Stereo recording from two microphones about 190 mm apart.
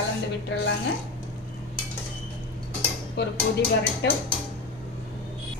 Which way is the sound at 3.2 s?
65° left (ahead or behind).